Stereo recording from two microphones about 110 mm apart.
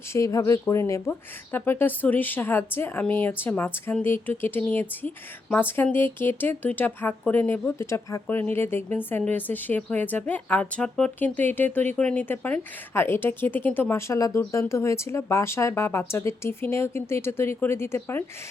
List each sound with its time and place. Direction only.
0.1 s speech: 30° left (ahead or behind)
14.1 s speech: 30° left (ahead or behind)